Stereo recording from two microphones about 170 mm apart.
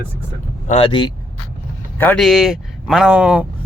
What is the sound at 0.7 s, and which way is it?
Speech, 30° left (ahead or behind).